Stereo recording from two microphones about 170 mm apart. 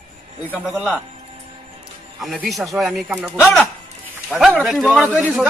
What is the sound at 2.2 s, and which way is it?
A man's voice, centre (ahead or behind).